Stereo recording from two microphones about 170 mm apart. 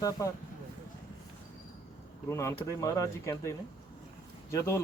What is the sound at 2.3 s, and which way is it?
Speech, 15° left (ahead or behind).